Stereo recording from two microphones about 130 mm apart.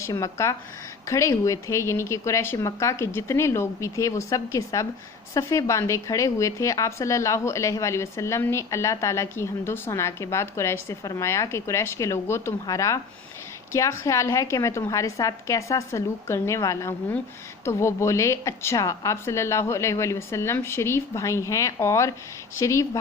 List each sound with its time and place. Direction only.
0.0 s a woman's voice: 25° left (ahead or behind)